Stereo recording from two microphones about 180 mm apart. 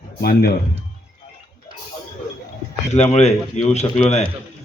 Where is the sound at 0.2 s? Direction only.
55° left (ahead or behind).